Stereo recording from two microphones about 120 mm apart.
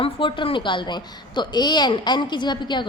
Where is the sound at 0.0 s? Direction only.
45° left (ahead or behind).